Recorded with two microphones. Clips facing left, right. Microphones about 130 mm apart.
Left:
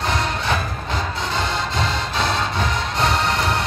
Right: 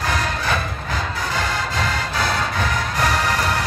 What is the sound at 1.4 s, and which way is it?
Music, 20° left (ahead or behind).